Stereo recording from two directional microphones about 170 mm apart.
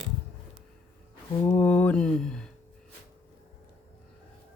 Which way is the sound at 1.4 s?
10° left (ahead or behind).